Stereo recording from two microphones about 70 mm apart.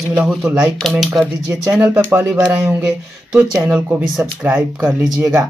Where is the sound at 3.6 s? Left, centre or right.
Centre.